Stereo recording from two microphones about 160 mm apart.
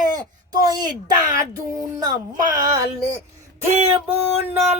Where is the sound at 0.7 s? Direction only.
25° right (ahead or behind).